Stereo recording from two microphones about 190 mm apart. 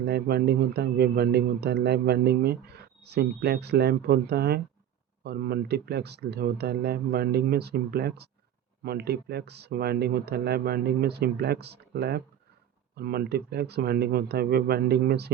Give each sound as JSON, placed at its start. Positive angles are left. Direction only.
{"t": 0.0, "sound": "speech", "side_deg": -60}